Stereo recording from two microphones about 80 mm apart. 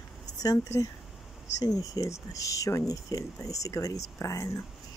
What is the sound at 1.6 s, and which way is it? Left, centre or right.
Speech, left.